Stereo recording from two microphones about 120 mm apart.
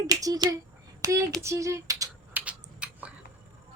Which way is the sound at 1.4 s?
25° right (ahead or behind).